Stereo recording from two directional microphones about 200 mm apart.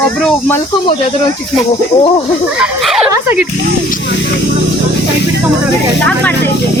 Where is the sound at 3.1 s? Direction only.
10° right (ahead or behind).